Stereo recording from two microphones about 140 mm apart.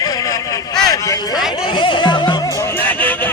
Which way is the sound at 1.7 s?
35° left (ahead or behind).